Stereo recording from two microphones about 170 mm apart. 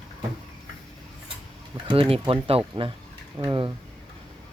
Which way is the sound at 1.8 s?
30° right (ahead or behind).